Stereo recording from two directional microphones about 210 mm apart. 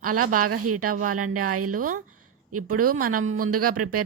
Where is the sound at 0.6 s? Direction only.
90° right.